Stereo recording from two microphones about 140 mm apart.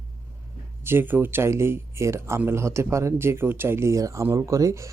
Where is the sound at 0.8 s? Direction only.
15° right (ahead or behind).